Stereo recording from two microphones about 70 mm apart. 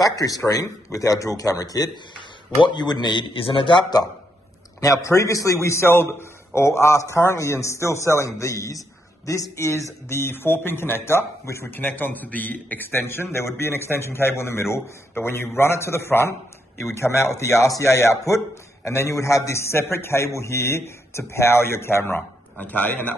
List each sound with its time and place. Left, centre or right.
0.0 s a man's voice: left
2.7 s a man's voice: left
4.7 s a man's voice: left
11.7 s a man's voice: left